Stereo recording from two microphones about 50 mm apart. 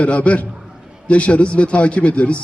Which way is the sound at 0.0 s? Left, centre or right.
Left.